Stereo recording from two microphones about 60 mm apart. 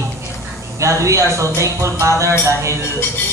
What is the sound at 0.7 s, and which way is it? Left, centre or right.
Speech, right.